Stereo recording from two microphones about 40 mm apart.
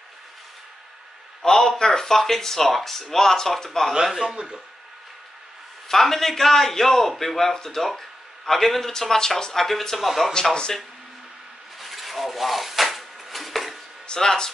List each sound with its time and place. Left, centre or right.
1.4 s speech: centre
3.9 s a man's voice: centre
5.9 s speech: centre
11.8 s a sound: centre
14.0 s speech: centre